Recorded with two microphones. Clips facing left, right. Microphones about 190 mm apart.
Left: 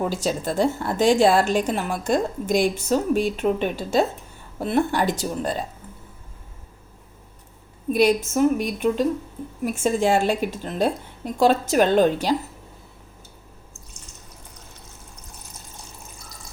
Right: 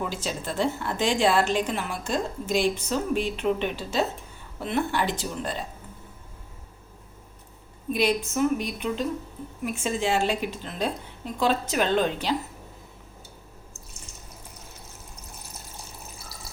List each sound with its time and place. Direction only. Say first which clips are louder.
0.0 s a woman's voice: left 7 dB; 40° left (ahead or behind)
7.9 s a woman's voice: left 6 dB; 45° left (ahead or behind)